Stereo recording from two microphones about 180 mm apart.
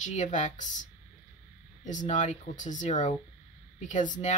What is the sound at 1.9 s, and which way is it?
Speech, 45° left (ahead or behind).